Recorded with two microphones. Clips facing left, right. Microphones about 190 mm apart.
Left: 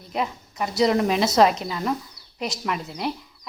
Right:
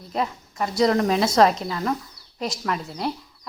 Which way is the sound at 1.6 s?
15° left (ahead or behind).